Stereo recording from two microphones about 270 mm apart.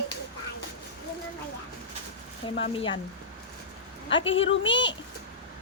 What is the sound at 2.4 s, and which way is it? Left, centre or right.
Speech, centre.